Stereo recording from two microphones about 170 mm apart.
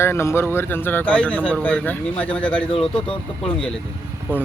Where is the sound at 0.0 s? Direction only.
15° left (ahead or behind).